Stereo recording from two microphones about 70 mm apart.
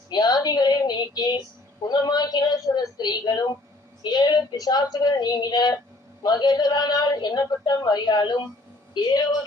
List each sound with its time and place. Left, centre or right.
0.1 s a woman's voice: left